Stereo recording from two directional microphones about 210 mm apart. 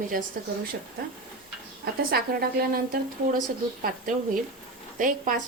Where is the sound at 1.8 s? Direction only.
45° right (ahead or behind).